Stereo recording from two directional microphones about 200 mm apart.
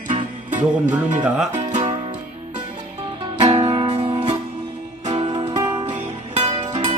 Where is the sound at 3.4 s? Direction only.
30° right (ahead or behind).